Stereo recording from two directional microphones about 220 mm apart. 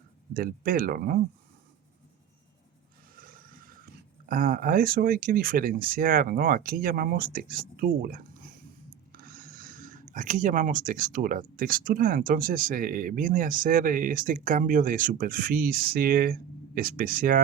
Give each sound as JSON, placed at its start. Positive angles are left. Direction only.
{"t": 0.3, "sound": "speech", "side_deg": -40}
{"t": 3.2, "sound": "speech", "side_deg": -40}